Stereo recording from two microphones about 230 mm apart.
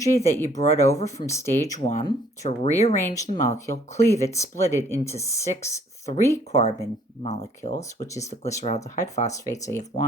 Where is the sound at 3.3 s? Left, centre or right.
Right.